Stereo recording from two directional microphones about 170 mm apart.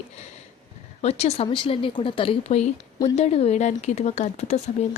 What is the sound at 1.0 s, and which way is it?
A woman's voice, 35° left (ahead or behind).